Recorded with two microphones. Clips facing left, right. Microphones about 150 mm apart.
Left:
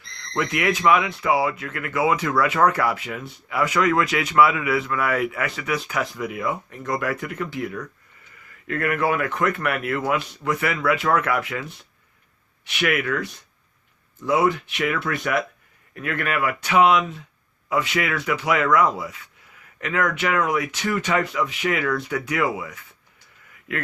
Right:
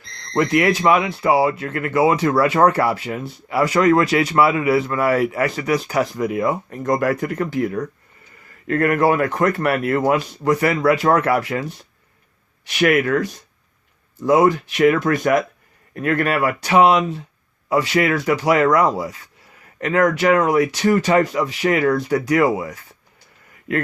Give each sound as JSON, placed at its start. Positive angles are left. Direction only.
{"t": 0.3, "sound": "speech", "side_deg": -35}